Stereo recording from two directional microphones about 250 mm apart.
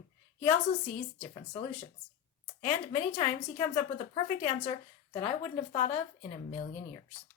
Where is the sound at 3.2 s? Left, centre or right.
Left.